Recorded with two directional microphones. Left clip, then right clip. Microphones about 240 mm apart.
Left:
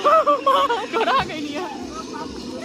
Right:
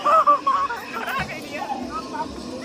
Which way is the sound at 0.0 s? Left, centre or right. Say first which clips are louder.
Left 1 dB; left.